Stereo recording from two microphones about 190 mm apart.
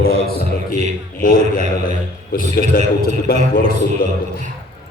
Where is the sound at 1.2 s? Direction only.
45° left (ahead or behind).